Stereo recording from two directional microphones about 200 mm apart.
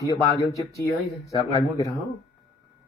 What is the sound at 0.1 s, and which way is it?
Speech, 15° left (ahead or behind).